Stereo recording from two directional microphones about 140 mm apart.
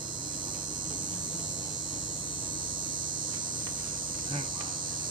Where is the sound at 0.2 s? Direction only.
35° right (ahead or behind).